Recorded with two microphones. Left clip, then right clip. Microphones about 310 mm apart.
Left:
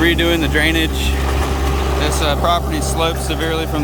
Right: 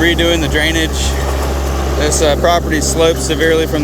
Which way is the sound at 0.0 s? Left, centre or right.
Centre.